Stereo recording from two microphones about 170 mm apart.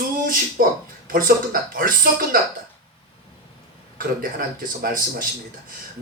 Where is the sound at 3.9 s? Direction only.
55° right (ahead or behind).